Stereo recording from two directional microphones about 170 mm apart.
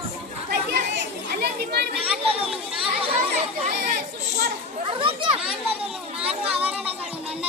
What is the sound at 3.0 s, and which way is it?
Children playing, 40° right (ahead or behind).